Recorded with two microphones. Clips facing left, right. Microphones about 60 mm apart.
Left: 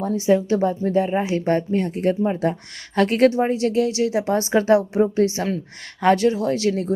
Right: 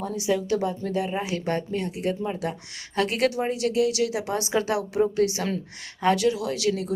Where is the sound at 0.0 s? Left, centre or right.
Left.